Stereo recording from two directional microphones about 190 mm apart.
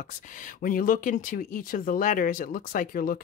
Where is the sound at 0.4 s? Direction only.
45° left (ahead or behind).